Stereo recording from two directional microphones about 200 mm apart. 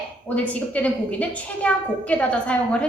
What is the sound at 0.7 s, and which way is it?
A woman's voice, 5° left (ahead or behind).